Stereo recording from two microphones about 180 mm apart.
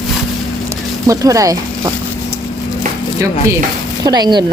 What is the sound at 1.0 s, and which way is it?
Speech, 20° right (ahead or behind).